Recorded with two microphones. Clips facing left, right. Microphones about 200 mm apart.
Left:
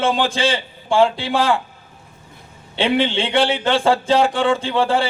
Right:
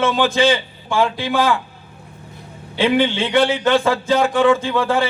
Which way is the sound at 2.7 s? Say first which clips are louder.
Right 1 dB; 30° left (ahead or behind).